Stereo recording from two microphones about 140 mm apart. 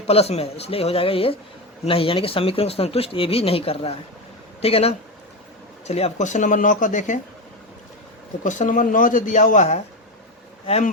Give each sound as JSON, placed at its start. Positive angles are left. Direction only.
{"t": 0.1, "sound": "speech", "side_deg": 45}
{"t": 8.4, "sound": "speech", "side_deg": 60}